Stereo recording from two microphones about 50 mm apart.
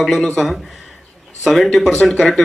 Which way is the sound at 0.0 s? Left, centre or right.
Centre.